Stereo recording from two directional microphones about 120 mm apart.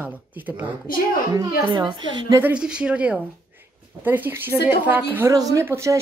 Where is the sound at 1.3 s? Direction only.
35° right (ahead or behind).